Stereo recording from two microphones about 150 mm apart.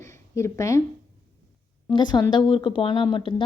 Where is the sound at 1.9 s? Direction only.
30° left (ahead or behind).